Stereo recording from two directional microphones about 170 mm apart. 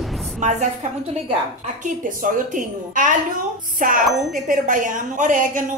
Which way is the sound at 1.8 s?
50° right (ahead or behind).